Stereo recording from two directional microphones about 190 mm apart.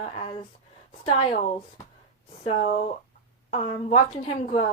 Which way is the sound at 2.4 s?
30° left (ahead or behind).